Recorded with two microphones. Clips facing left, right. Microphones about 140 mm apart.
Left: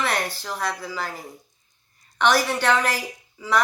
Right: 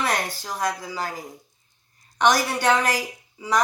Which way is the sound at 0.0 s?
10° right (ahead or behind).